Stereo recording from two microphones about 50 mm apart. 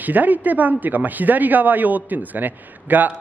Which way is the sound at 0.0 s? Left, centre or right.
Right.